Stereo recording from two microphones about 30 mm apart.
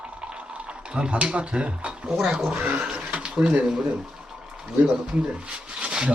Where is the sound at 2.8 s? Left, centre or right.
Right.